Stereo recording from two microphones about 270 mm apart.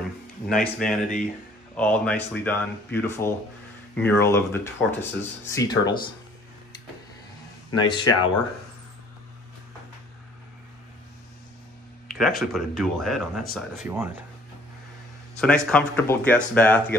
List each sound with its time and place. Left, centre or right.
0.5 s speech: centre
7.7 s speech: centre
12.2 s speech: centre
15.3 s speech: centre